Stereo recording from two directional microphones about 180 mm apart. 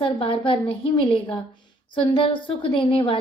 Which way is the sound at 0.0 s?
30° left (ahead or behind).